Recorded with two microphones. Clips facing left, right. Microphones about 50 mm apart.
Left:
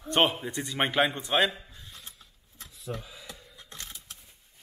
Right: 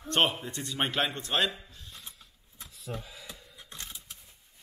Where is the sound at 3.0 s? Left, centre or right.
Centre.